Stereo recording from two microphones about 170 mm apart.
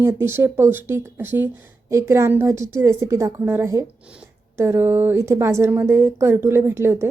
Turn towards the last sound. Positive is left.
turn(degrees=-15)  # may be behind; listen again after turning